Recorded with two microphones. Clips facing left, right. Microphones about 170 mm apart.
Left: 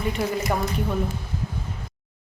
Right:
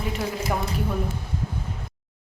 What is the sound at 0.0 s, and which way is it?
Speech, centre (ahead or behind).